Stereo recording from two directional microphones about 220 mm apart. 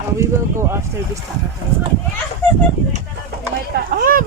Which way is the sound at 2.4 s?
10° left (ahead or behind).